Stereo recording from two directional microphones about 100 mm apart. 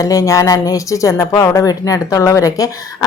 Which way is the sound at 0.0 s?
35° left (ahead or behind).